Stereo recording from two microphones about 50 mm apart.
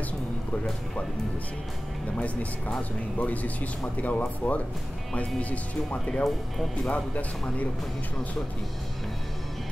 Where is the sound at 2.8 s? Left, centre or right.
Left.